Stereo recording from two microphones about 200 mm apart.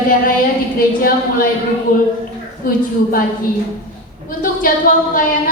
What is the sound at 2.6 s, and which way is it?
Speech, 45° left (ahead or behind).